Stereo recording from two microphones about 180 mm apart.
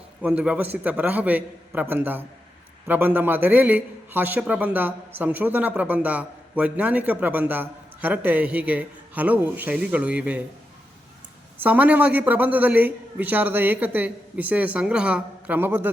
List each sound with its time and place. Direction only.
0.2 s a man's voice: 5° right (ahead or behind)
11.5 s a man's voice: 10° right (ahead or behind)